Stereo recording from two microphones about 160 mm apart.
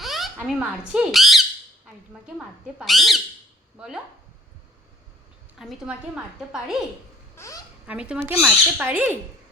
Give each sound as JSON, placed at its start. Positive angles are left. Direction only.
{"t": 0.0, "sound": "speech", "side_deg": 0}
{"t": 2.7, "sound": "speech", "side_deg": 0}
{"t": 5.5, "sound": "speech", "side_deg": -5}
{"t": 7.3, "sound": "a child's voice", "side_deg": 20}
{"t": 7.9, "sound": "owl", "side_deg": -5}